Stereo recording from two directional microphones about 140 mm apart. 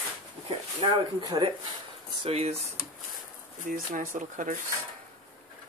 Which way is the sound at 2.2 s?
45° right (ahead or behind).